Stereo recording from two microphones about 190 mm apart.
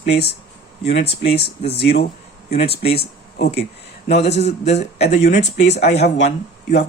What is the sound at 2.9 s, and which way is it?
Speech, 55° left (ahead or behind).